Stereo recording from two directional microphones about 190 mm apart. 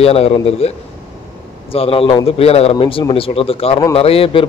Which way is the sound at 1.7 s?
30° left (ahead or behind).